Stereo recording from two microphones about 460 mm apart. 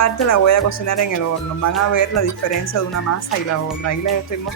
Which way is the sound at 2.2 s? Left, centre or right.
Left.